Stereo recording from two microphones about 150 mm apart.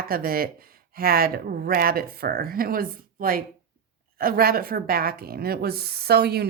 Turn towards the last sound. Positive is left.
turn(degrees=-90)